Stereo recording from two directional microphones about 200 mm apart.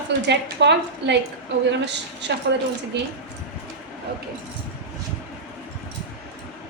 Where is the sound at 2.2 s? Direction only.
60° right (ahead or behind).